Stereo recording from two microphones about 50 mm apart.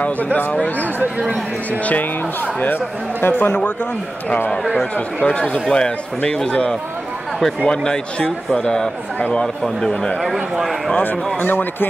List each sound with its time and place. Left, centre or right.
0.0 s speech: left
2.6 s a man's voice: left
4.9 s a man's voice: left
11.3 s a man's voice: left